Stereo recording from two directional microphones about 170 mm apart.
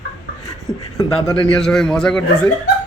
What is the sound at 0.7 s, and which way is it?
Beatboxing, 20° left (ahead or behind).